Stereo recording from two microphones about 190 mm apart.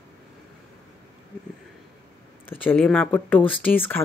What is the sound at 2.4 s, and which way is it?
Speech, 5° left (ahead or behind).